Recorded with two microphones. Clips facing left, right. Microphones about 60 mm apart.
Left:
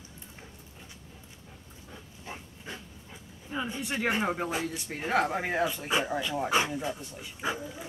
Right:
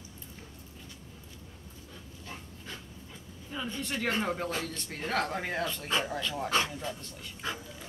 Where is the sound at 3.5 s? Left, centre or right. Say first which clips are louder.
Left 3 dB; centre.